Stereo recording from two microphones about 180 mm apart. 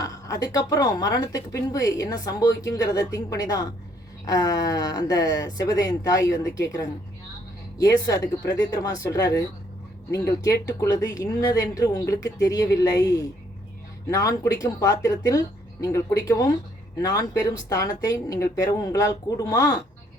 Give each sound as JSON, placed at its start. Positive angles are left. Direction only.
{"t": 0.0, "sound": "speech", "side_deg": 20}